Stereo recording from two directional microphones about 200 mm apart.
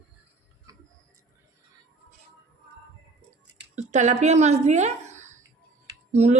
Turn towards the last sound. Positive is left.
turn(degrees=-35)  # may be behind; listen again after turning